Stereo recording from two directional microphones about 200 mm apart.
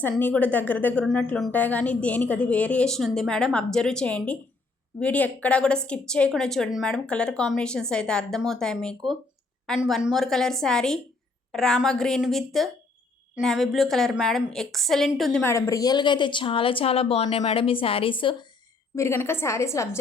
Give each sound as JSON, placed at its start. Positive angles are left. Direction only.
{"t": 0.0, "sound": "a woman's voice", "side_deg": 10}
{"t": 18.9, "sound": "a woman's voice", "side_deg": 15}